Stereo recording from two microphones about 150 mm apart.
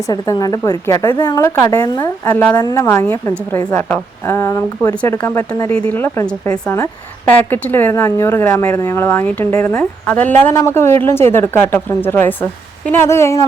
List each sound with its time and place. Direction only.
0.1 s a woman's voice: 25° left (ahead or behind)
1.5 s a woman's voice: 15° left (ahead or behind)
2.3 s a woman's voice: 10° left (ahead or behind)